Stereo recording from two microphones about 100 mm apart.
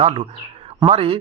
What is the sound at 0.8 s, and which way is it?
Speech, 70° right (ahead or behind).